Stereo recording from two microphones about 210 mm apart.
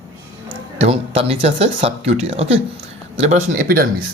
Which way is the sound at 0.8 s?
30° right (ahead or behind).